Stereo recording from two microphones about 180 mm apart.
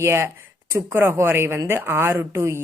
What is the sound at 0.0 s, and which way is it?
A woman's voice, 15° right (ahead or behind).